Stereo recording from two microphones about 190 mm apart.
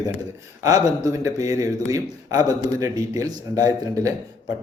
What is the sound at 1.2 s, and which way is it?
A man's voice, 20° right (ahead or behind).